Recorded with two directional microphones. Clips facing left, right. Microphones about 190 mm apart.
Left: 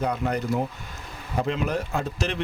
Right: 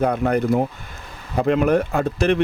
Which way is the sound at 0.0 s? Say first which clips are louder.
Right 7 dB; 55° right (ahead or behind).